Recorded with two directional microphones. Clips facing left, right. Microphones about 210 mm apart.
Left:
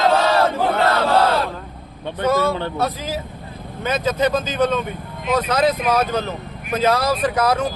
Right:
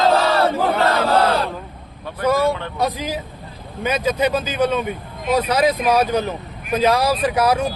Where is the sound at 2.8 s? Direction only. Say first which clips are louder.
Right 1 dB; 15° right (ahead or behind).